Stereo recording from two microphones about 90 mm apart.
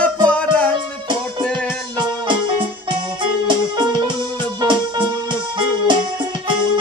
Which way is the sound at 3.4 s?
60° right (ahead or behind).